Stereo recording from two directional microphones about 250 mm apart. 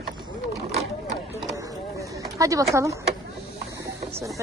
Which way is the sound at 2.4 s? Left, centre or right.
Centre.